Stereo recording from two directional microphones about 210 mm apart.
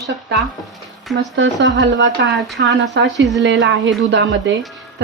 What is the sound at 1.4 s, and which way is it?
Speech, 55° right (ahead or behind).